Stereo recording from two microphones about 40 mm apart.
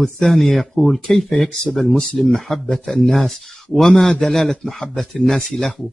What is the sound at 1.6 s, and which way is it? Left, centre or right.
Speech, centre.